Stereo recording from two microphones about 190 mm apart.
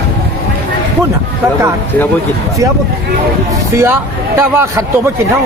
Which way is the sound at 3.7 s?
15° right (ahead or behind).